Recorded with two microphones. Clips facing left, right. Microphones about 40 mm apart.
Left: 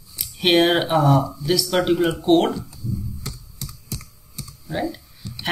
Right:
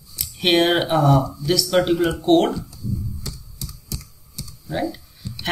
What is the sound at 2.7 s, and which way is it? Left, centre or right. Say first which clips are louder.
Computer keyboard: right 1 dB; left.